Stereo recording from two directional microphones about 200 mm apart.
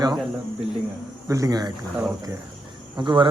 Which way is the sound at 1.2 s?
15° right (ahead or behind).